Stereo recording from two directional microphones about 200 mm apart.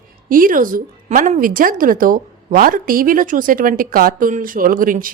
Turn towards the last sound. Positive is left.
turn(degrees=-45)  # may be behind; listen again after turning